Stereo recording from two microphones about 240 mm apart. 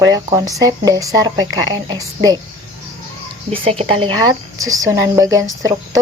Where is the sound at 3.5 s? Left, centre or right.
Right.